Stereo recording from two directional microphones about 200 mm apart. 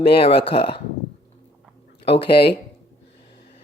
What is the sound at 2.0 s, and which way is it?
Speech, 30° left (ahead or behind).